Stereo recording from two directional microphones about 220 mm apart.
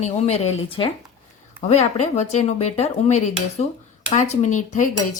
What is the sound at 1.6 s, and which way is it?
Speech, 30° left (ahead or behind).